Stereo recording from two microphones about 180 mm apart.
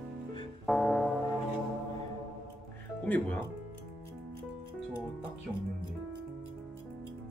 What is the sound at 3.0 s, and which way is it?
Speech, 10° left (ahead or behind).